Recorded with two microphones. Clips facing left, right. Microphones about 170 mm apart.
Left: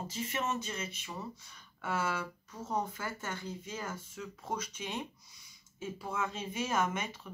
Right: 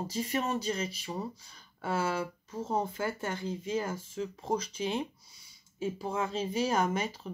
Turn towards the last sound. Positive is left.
turn(degrees=-35)  # may be behind; listen again after turning